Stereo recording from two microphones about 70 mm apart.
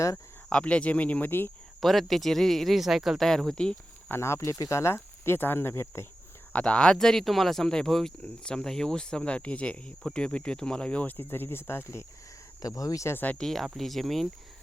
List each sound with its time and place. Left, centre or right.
0.5 s speech: centre
1.8 s speech: centre
3.2 s speech: centre
4.1 s speech: left
6.5 s speech: centre; by 12.0 s left
12.6 s speech: left
13.1 s speech: left
13.4 s speech: centre